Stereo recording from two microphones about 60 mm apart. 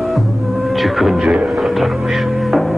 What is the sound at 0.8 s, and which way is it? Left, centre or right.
Speech, centre.